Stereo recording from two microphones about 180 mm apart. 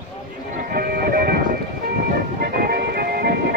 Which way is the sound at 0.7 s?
60° right (ahead or behind).